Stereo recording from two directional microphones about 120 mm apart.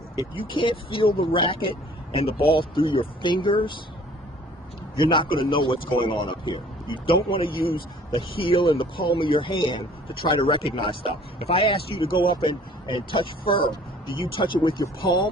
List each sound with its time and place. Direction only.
0.3 s a man's voice: 45° left (ahead or behind)
4.9 s a man's voice: 45° left (ahead or behind)